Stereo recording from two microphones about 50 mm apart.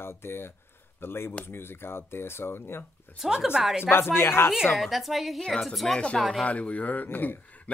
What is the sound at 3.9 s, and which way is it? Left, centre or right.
Speech, left.